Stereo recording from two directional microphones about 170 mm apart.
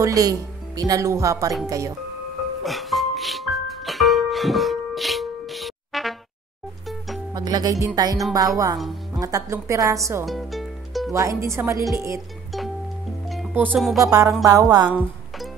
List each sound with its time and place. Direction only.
0.0 s speech: 20° right (ahead or behind)
2.6 s music: centre (ahead or behind)
7.3 s speech: 25° right (ahead or behind)
8.7 s speech: centre (ahead or behind)
9.2 s speech: 20° right (ahead or behind)
10.2 s music: centre (ahead or behind)
11.1 s speech: 20° right (ahead or behind)
13.5 s music: 10° right (ahead or behind)
13.9 s speech: 20° right (ahead or behind)